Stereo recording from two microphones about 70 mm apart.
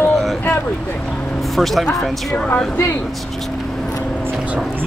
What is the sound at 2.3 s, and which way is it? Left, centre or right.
Speech, left.